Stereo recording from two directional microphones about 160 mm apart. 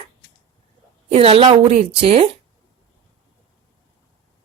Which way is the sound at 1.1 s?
40° right (ahead or behind).